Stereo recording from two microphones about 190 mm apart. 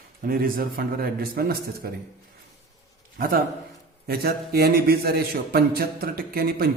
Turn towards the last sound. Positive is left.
turn(degrees=-50)  # may be behind; listen again after turning